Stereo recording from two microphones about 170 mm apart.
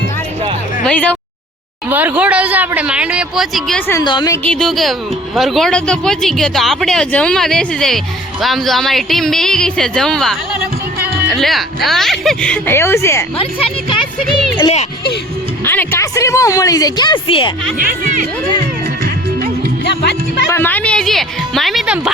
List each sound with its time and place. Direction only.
0.9 s speech: 5° left (ahead or behind)
1.9 s speech: 10° right (ahead or behind); by 4.0 s 10° left (ahead or behind)
4.0 s a woman's voice: 30° left (ahead or behind)
4.3 s speech: 5° left (ahead or behind)
14.5 s speech: 30° left (ahead or behind)
15.6 s a woman's voice: 10° left (ahead or behind); by 17.5 s 30° left (ahead or behind)
17.7 s speech: 55° right (ahead or behind)
19.8 s speech: 80° left
20.5 s speech: 10° left (ahead or behind); by 22.1 s 5° right (ahead or behind)